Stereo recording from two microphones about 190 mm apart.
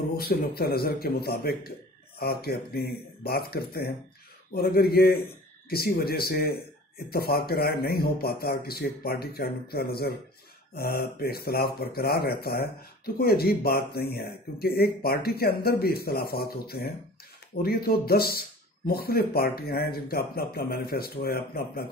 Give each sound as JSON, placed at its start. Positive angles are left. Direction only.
{"t": 0.1, "sound": "speech", "side_deg": 55}